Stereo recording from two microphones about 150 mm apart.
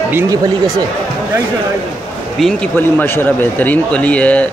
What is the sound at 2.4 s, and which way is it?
Speech, 10° left (ahead or behind).